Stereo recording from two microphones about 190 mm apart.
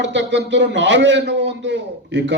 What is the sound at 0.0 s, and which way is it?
A man's voice, 70° right (ahead or behind).